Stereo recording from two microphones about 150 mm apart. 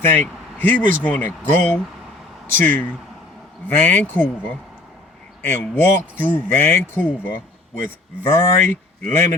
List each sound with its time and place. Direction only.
0.0 s speech: 15° left (ahead or behind)